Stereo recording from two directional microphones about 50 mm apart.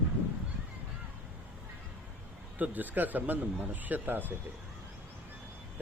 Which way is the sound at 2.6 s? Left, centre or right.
Right.